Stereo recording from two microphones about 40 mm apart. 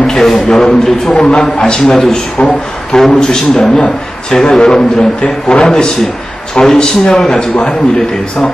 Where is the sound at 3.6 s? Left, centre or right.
Left; by 7.5 s centre.